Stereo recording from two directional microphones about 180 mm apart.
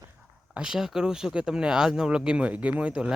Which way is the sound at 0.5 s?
5° right (ahead or behind).